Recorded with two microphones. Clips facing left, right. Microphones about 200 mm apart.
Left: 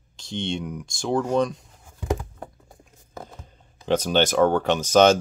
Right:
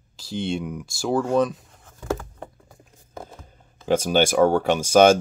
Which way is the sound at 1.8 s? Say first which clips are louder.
Even; 15° left (ahead or behind).